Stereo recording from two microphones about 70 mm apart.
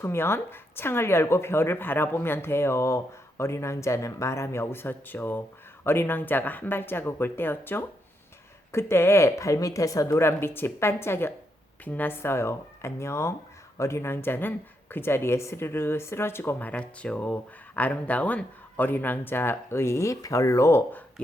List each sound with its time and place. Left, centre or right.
0.0 s a woman's voice: left
10.2 s a woman's voice: left
16.7 s speech: centre; by 20.8 s left